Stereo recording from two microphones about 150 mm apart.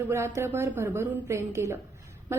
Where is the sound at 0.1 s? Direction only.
20° right (ahead or behind).